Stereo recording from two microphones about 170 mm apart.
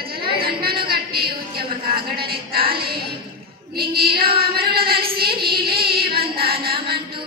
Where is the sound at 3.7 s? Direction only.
65° right (ahead or behind).